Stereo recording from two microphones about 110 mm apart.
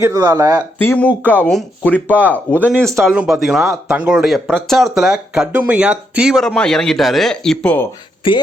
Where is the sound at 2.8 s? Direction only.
5° left (ahead or behind).